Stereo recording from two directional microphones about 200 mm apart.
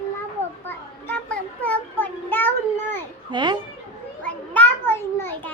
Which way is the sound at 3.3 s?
20° right (ahead or behind).